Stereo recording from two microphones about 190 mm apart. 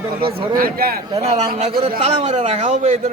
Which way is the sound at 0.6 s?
50° right (ahead or behind).